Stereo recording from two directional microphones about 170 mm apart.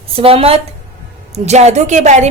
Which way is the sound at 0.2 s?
35° right (ahead or behind).